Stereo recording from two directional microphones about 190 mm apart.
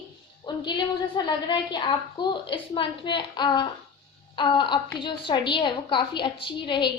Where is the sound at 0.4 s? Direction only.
25° left (ahead or behind).